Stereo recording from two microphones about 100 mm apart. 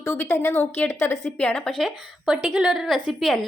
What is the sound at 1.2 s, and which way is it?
Speech, 10° left (ahead or behind).